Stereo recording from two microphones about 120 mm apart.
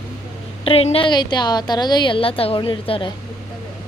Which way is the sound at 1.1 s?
35° left (ahead or behind).